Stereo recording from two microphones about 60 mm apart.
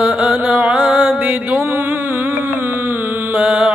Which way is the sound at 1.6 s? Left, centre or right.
Right.